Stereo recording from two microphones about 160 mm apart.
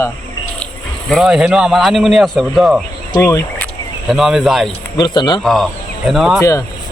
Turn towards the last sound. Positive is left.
turn(degrees=20)  # may be behind; listen again after turning